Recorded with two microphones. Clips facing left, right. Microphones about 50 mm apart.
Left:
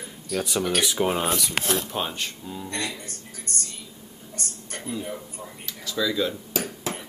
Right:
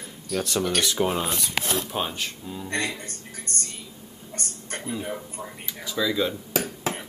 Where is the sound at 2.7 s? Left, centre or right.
Right.